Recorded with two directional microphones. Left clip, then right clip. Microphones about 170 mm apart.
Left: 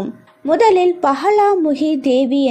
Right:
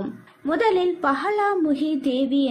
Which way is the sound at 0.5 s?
40° left (ahead or behind).